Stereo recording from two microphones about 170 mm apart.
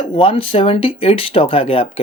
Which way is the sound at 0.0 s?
30° left (ahead or behind).